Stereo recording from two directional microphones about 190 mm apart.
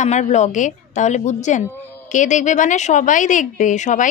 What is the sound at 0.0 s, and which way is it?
A woman's voice, 40° left (ahead or behind).